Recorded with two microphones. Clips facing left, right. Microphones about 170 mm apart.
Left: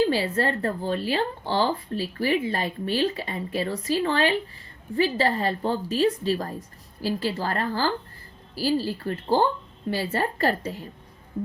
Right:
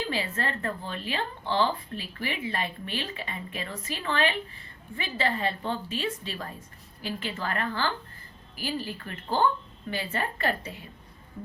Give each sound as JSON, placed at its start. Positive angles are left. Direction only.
{"t": 0.0, "sound": "speech", "side_deg": 35}